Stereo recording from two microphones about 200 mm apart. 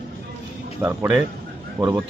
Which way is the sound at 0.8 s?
10° right (ahead or behind).